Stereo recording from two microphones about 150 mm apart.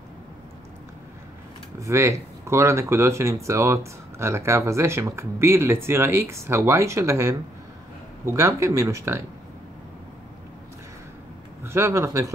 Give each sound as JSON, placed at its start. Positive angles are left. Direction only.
{"t": 1.8, "sound": "speech", "side_deg": -20}
{"t": 11.6, "sound": "speech", "side_deg": -20}